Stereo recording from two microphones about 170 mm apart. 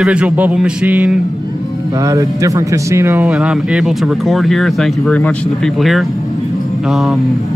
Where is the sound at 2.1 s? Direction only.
20° right (ahead or behind).